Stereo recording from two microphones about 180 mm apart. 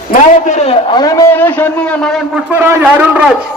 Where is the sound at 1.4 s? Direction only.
10° left (ahead or behind).